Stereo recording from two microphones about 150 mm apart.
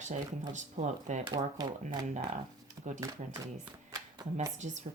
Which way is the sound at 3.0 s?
25° right (ahead or behind).